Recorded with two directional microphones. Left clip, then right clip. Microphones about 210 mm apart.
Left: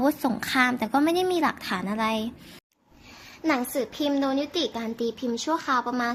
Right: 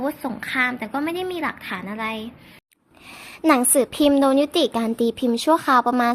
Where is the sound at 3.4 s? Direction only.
45° right (ahead or behind).